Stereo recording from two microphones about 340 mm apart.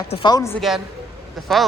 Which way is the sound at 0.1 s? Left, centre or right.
Centre.